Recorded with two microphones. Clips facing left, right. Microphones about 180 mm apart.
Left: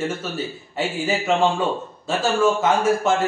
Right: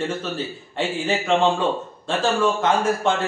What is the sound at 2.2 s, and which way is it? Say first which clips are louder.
Speech: left 1 dB; 5° left (ahead or behind).